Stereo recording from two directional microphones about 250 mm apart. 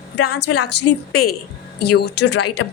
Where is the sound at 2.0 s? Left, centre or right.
Left.